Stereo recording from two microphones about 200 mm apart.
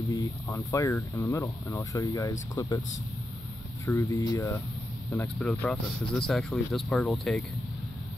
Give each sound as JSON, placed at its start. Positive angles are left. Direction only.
{"t": 0.1, "sound": "speech", "side_deg": 15}
{"t": 3.8, "sound": "speech", "side_deg": 15}